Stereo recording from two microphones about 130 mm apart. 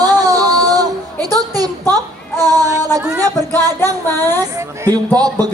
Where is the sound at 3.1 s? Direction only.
25° right (ahead or behind).